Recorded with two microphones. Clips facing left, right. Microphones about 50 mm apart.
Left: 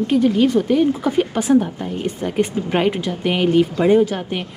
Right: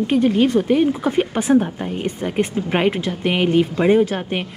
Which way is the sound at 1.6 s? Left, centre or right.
Right.